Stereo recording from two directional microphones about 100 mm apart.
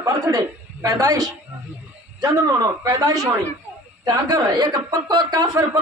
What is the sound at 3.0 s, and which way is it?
A man's voice, 40° right (ahead or behind).